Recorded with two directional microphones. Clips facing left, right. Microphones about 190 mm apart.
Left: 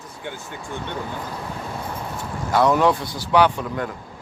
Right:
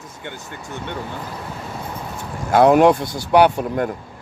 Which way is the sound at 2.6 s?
55° right (ahead or behind).